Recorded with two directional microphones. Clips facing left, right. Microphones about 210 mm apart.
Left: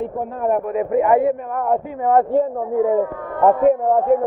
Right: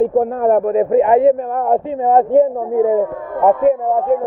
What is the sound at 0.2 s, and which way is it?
A man's voice, 45° right (ahead or behind).